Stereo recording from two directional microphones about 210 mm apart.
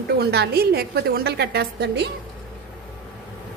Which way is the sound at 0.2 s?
50° right (ahead or behind).